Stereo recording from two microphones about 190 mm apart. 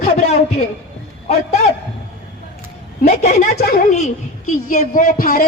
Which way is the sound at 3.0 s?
35° left (ahead or behind).